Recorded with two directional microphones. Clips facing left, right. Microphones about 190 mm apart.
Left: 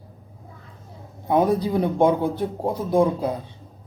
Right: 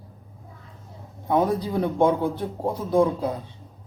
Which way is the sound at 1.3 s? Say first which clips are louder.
Left 3 dB; 15° left (ahead or behind).